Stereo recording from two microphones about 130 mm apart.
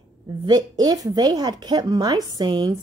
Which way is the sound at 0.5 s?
30° right (ahead or behind).